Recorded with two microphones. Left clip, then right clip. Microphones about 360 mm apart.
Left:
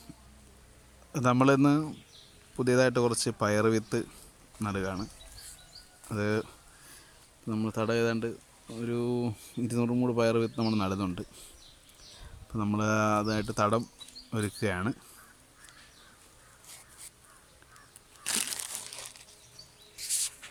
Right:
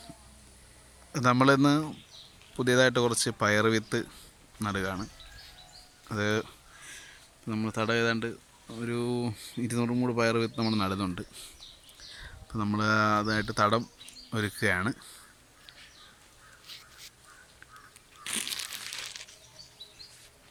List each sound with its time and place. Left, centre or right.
1.1 s speech: centre
6.1 s a sound: centre
7.4 s speech: centre
12.5 s speech: centre
18.2 s crushing: left